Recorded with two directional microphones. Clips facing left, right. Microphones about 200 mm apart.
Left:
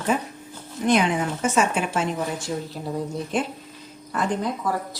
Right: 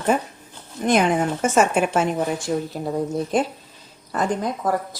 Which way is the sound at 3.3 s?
40° right (ahead or behind).